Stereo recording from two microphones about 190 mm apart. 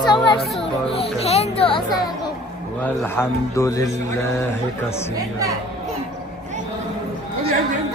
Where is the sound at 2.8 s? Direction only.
10° left (ahead or behind).